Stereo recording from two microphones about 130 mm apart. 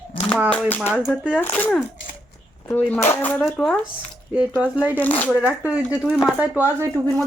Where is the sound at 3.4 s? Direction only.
Centre (ahead or behind).